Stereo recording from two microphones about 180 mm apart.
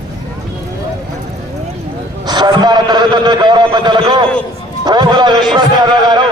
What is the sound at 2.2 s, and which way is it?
A man's voice, 25° right (ahead or behind).